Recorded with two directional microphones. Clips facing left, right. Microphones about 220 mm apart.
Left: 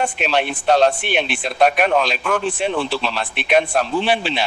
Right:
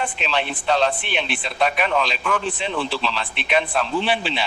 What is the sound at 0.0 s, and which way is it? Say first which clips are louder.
A man's voice: left 5 dB; 45° left (ahead or behind).